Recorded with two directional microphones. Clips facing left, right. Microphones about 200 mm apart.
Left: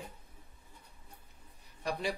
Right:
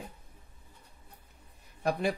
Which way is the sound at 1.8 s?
50° right (ahead or behind).